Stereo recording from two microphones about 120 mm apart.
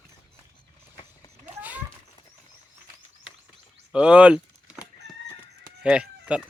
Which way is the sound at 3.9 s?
10° right (ahead or behind).